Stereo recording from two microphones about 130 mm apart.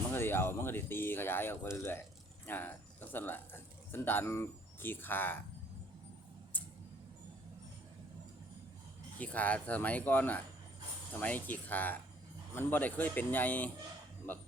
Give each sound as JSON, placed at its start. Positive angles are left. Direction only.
{"t": 0.1, "sound": "speech", "side_deg": 15}
{"t": 9.1, "sound": "speech", "side_deg": 10}